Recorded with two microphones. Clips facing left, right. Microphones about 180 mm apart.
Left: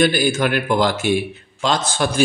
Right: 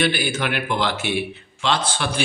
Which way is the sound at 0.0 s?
45° left (ahead or behind).